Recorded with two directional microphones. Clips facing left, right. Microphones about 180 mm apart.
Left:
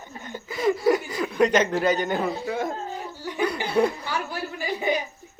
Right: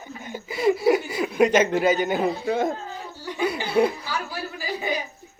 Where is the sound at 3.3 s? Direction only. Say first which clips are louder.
Even; 5° right (ahead or behind).